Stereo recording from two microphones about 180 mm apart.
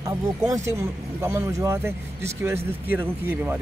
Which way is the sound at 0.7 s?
15° right (ahead or behind).